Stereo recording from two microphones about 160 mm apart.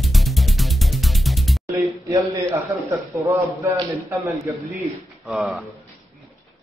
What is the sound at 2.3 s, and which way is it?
A man's voice, 20° right (ahead or behind).